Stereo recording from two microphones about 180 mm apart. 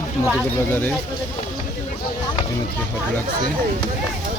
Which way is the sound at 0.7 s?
10° left (ahead or behind).